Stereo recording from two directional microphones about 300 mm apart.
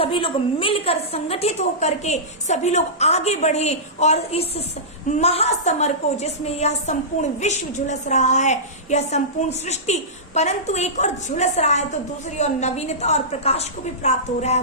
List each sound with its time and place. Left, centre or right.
0.0 s a woman's voice: centre